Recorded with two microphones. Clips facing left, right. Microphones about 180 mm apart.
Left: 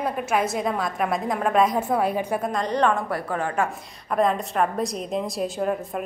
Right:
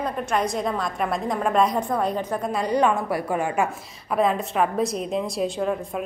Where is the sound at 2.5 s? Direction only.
10° right (ahead or behind).